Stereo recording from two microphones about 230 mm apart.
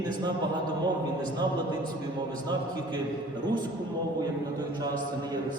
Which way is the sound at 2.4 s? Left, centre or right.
Centre.